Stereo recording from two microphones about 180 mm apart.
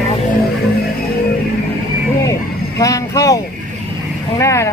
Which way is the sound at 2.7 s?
20° left (ahead or behind).